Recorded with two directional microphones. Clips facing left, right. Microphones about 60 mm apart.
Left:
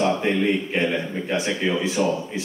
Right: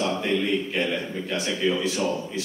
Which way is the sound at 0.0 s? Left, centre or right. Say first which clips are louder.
Left 4 dB; left.